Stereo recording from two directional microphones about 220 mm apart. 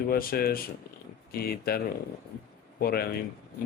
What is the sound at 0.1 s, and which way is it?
Speech, 45° left (ahead or behind).